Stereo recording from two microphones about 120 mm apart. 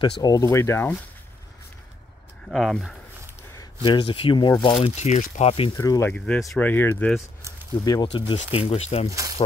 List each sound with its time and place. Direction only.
0.0 s speech: 35° left (ahead or behind)
2.4 s speech: 5° left (ahead or behind)
3.8 s speech: 45° left (ahead or behind)
4.7 s speech: 60° left (ahead or behind)
5.7 s speech: 25° left (ahead or behind)
6.1 s speech: 10° left (ahead or behind)
7.8 s speech: 30° left (ahead or behind)
8.1 s speech: 50° left (ahead or behind)